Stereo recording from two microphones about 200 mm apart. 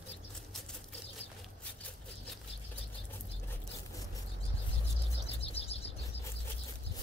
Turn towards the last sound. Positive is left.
turn(degrees=30)  # may be behind; listen again after turning